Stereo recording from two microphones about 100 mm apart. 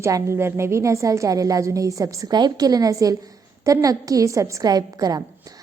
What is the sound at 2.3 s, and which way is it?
A woman's voice, 45° right (ahead or behind).